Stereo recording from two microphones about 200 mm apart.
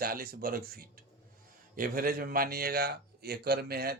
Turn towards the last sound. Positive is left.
turn(degrees=-50)  # may be behind; listen again after turning